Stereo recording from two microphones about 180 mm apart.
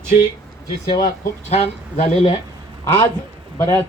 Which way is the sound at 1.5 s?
35° left (ahead or behind).